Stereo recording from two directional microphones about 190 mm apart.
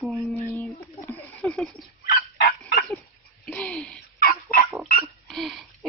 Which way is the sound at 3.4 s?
5° left (ahead or behind).